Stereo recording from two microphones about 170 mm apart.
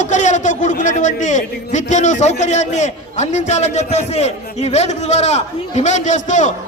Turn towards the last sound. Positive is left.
turn(degrees=45)  # may be behind; listen again after turning